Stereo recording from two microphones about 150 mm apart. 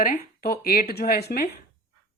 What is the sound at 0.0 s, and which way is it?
Speech, 80° left.